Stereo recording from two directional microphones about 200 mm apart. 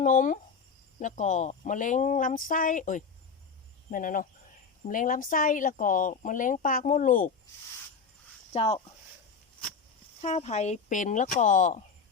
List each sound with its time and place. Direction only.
0.0 s speech: 40° left (ahead or behind)
8.5 s speech: 30° left (ahead or behind)
10.2 s speech: 35° left (ahead or behind)